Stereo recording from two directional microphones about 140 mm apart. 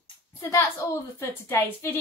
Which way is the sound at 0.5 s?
20° left (ahead or behind).